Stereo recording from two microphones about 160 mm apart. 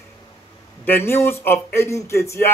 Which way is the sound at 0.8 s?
15° left (ahead or behind).